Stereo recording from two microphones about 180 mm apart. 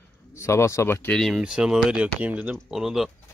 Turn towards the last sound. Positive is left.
turn(degrees=0)  # may be behind; listen again after turning